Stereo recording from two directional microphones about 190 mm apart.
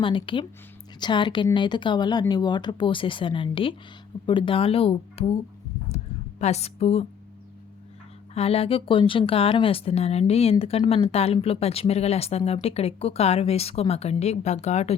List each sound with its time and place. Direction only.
0.0 s speech: 25° left (ahead or behind)
6.4 s speech: 35° left (ahead or behind)
8.4 s speech: 30° left (ahead or behind)